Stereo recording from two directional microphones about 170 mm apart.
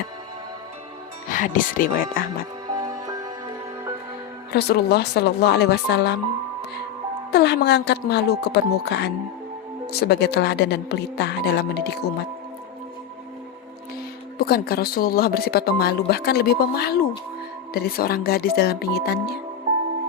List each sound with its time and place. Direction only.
1.3 s speech: 50° left (ahead or behind)
2.7 s music: 20° right (ahead or behind)
4.5 s speech: 70° left (ahead or behind)
7.3 s speech: 75° left (ahead or behind)
14.3 s speech: 65° left (ahead or behind)